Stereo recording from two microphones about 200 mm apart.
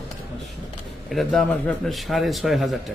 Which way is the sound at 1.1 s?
Centre (ahead or behind).